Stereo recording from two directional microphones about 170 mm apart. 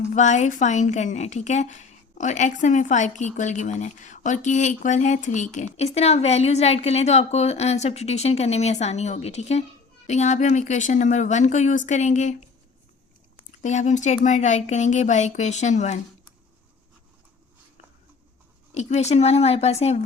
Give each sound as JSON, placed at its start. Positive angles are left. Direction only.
{"t": 0.1, "sound": "a woman's voice", "side_deg": 45}
{"t": 13.6, "sound": "a woman's voice", "side_deg": 45}
{"t": 18.7, "sound": "speech", "side_deg": 40}